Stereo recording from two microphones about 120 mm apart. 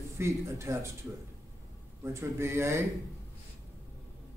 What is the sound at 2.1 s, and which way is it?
Speech, 20° right (ahead or behind).